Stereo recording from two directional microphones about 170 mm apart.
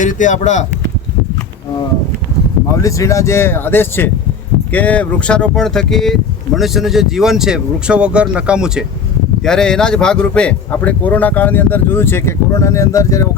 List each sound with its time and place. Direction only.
0.0 s speech: 50° left (ahead or behind)
2.8 s speech: 20° left (ahead or behind)